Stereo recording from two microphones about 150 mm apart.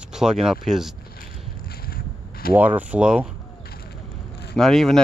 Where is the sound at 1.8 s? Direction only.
90° left.